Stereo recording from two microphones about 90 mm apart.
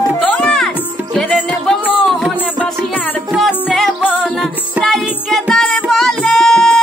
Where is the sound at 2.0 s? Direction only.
5° left (ahead or behind).